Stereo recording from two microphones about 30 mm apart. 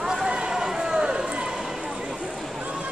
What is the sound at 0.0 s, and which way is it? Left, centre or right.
Run, centre.